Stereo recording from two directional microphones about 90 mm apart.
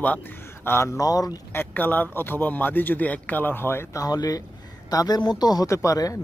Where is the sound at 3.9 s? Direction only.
45° left (ahead or behind).